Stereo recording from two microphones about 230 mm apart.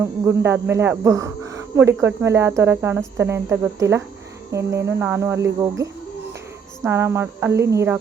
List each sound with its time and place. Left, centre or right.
0.0 s speech: centre